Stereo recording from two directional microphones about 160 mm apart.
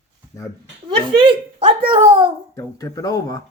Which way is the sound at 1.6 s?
35° right (ahead or behind).